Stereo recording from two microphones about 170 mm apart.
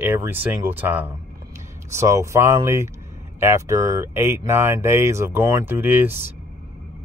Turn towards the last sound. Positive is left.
turn(degrees=-10)  # may be behind; listen again after turning